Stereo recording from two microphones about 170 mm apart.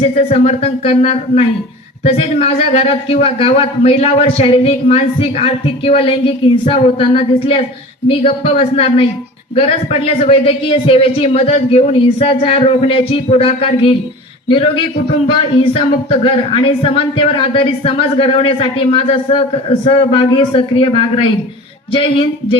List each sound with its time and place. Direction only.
0.0 s a man's voice: 40° left (ahead or behind)
15.5 s a man's voice: 35° left (ahead or behind)